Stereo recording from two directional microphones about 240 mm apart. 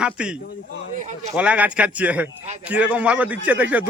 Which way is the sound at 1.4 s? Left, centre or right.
Centre.